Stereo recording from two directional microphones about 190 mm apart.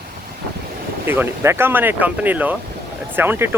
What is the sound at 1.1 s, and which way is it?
Speech, 10° right (ahead or behind).